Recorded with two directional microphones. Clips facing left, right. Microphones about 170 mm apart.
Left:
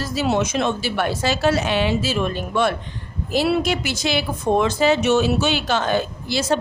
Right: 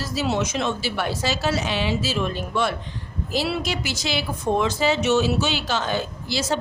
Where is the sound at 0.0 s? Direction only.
55° left (ahead or behind).